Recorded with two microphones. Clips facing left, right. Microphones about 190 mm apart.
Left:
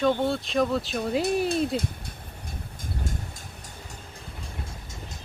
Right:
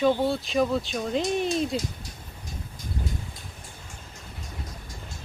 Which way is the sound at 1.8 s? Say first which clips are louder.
Left 2 dB; 55° left (ahead or behind).